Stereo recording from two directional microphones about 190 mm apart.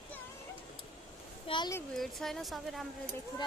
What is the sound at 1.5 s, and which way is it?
Speech, 25° left (ahead or behind).